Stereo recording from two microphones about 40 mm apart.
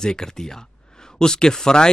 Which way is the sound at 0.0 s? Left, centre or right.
Centre.